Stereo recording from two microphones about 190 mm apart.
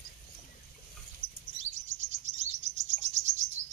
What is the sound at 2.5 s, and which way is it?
Chirp, 35° right (ahead or behind).